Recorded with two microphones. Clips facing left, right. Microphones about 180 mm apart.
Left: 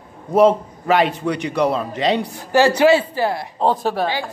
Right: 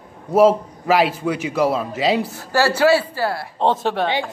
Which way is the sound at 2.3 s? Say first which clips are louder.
Left 4 dB; 20° left (ahead or behind).